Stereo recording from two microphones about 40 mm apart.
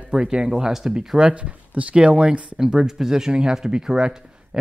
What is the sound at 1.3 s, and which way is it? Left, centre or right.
Speech, right.